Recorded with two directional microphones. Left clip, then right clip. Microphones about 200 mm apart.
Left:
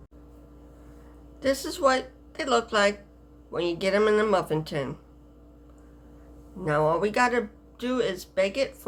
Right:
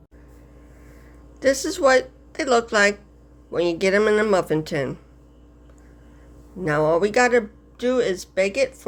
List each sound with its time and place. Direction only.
1.4 s speech: 35° right (ahead or behind)
6.6 s speech: 30° right (ahead or behind)